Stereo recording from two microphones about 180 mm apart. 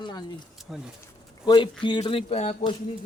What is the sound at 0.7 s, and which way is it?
Speech, centre (ahead or behind).